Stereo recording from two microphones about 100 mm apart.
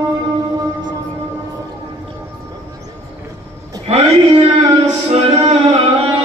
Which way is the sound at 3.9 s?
90° right.